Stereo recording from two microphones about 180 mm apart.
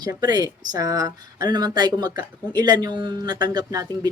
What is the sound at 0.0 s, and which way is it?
Speech, 20° right (ahead or behind).